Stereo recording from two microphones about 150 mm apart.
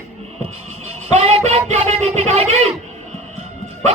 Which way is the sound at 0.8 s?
45° right (ahead or behind).